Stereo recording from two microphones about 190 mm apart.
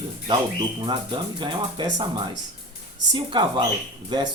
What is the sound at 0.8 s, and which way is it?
Speech, 25° right (ahead or behind).